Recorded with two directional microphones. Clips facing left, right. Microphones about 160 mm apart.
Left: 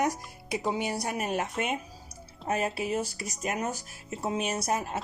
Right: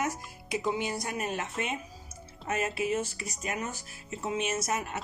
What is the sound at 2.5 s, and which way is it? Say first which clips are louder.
Speech: left 1 dB; 35° left (ahead or behind).